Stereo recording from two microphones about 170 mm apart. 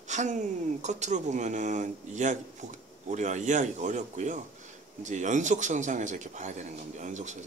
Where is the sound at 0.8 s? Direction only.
45° right (ahead or behind).